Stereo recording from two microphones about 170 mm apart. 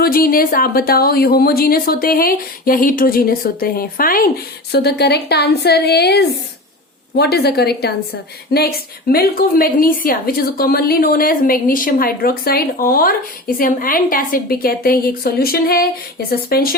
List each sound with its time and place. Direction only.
0.0 s a woman's voice: 60° left (ahead or behind)
4.7 s a woman's voice: 75° left (ahead or behind)